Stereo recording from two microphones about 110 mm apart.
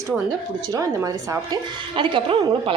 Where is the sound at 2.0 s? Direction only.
45° right (ahead or behind).